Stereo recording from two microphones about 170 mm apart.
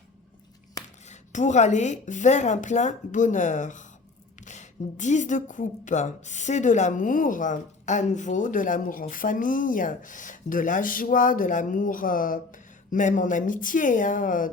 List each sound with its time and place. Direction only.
1.0 s a woman's voice: 45° left (ahead or behind)